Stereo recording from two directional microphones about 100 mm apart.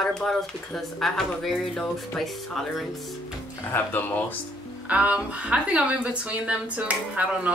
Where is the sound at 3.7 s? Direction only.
20° left (ahead or behind).